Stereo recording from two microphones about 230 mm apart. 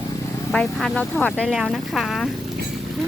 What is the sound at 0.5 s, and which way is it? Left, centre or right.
Speech, centre.